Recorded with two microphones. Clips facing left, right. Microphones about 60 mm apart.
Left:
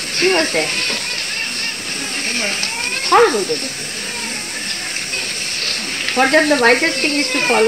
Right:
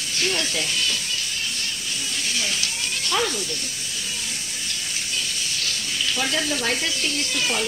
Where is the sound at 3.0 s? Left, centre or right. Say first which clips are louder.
Left 14 dB; left.